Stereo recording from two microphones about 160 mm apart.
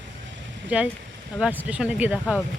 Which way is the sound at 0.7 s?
10° right (ahead or behind).